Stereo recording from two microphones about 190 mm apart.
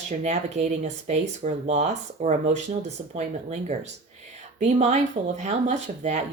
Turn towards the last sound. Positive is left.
turn(degrees=-40)  # may be behind; listen again after turning